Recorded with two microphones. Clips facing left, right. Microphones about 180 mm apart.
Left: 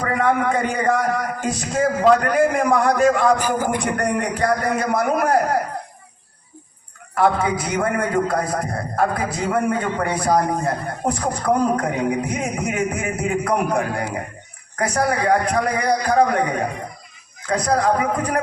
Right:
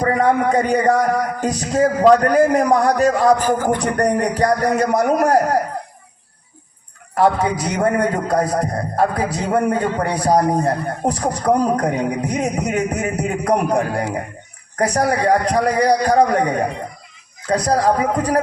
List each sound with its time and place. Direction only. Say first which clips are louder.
0.0 s a man's voice: right 3 dB; 35° right (ahead or behind)
3.4 s music: right 4 dB; 10° left (ahead or behind)
3.8 s a man's voice: right 4 dB; 40° right (ahead or behind)
7.2 s a man's voice: right 2 dB; 40° right (ahead or behind)